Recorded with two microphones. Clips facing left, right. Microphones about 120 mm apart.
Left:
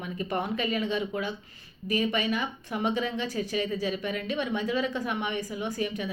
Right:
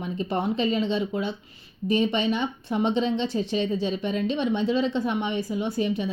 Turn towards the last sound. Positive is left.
turn(degrees=-25)  # may be behind; listen again after turning